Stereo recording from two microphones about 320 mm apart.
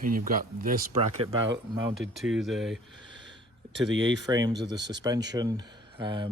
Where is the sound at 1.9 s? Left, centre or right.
Centre.